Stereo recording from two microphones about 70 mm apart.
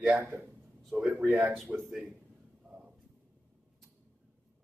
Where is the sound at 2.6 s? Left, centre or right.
Centre.